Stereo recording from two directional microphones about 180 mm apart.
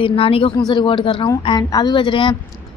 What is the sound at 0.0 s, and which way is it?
A woman's voice, 30° left (ahead or behind).